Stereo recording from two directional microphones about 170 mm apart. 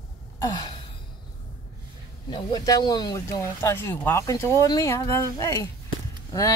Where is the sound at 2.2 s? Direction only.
25° left (ahead or behind).